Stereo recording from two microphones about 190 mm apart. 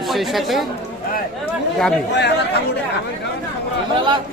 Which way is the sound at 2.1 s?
65° left (ahead or behind).